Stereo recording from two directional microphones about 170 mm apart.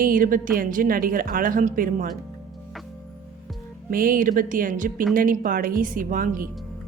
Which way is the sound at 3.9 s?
55° right (ahead or behind).